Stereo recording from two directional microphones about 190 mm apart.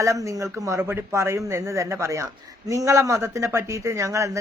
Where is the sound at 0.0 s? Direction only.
15° right (ahead or behind).